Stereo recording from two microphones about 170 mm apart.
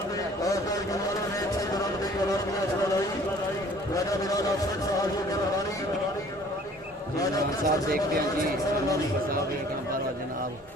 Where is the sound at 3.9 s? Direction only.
20° left (ahead or behind).